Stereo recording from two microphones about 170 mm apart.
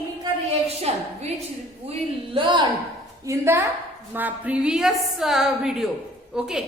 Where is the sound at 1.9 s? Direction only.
30° right (ahead or behind).